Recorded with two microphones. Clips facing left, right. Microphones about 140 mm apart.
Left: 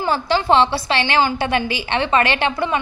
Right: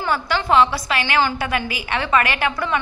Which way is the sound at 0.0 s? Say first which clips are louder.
Left 3 dB; 30° left (ahead or behind).